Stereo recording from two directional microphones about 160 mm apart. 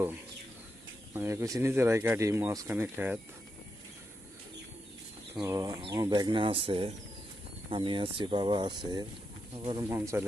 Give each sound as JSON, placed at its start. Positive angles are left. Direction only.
{"t": 1.1, "sound": "speech", "side_deg": -15}
{"t": 5.5, "sound": "speech", "side_deg": -20}